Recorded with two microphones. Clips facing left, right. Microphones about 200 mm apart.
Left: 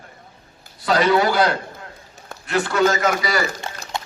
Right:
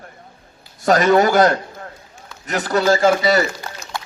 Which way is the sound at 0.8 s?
45° right (ahead or behind).